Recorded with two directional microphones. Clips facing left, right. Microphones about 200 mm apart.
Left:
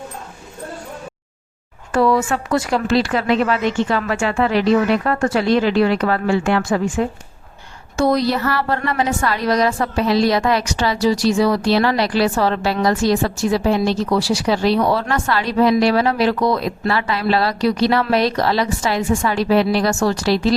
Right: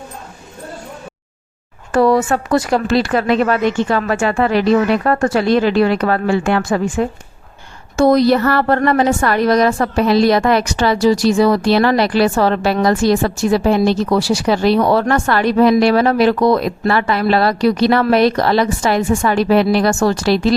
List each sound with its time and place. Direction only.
1.9 s a woman's voice: 40° right (ahead or behind)
6.6 s a woman's voice: 40° right (ahead or behind)
7.9 s a woman's voice: 50° right (ahead or behind)